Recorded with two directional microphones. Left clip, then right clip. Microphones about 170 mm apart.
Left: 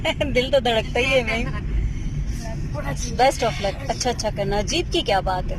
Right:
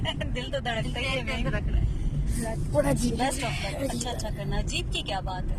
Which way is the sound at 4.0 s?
30° left (ahead or behind).